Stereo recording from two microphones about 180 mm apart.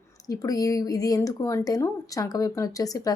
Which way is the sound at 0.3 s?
20° left (ahead or behind).